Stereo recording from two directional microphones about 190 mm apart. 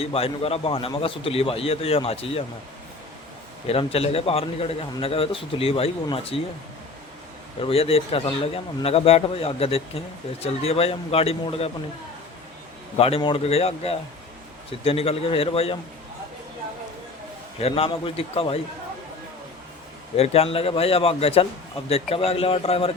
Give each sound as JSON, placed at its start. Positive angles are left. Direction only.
{"t": 0.0, "sound": "a man's voice", "side_deg": 30}
{"t": 3.7, "sound": "a man's voice", "side_deg": 30}
{"t": 7.6, "sound": "a man's voice", "side_deg": 30}
{"t": 13.0, "sound": "a man's voice", "side_deg": 30}
{"t": 17.6, "sound": "a man's voice", "side_deg": 30}
{"t": 20.1, "sound": "a man's voice", "side_deg": 30}